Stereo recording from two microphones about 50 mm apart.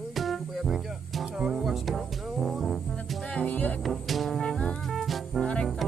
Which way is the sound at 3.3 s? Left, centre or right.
Left.